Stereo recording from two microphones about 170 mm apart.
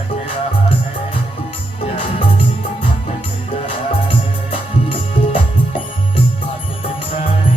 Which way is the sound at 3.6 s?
35° left (ahead or behind).